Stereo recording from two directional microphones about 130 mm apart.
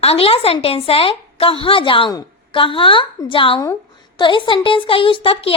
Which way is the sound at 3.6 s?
25° left (ahead or behind).